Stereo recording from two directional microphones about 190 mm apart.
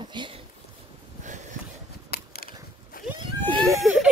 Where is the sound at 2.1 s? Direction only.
55° left (ahead or behind).